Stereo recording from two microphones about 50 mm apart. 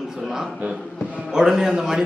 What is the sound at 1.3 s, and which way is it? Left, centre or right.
Speech, centre.